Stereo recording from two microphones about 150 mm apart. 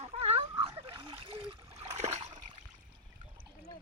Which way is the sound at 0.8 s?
35° right (ahead or behind).